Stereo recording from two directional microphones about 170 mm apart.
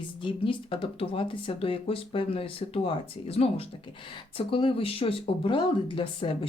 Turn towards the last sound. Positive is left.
turn(degrees=30)  # may be behind; listen again after turning